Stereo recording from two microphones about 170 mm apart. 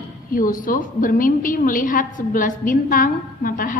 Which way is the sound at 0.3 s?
55° left (ahead or behind).